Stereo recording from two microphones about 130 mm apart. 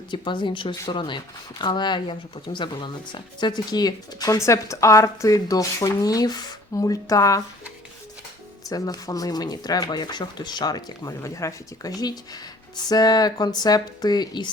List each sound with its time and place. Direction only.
0.1 s speech: 40° left (ahead or behind)
8.7 s speech: 30° left (ahead or behind)